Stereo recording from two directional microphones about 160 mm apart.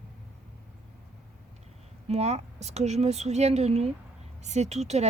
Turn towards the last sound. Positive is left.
turn(degrees=-45)  # may be behind; listen again after turning